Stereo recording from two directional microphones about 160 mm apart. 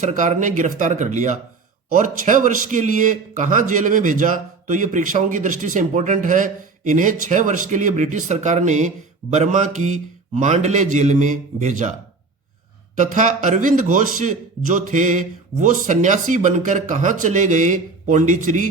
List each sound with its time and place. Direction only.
0.0 s a man's voice: 50° right (ahead or behind)
13.0 s a man's voice: 50° right (ahead or behind)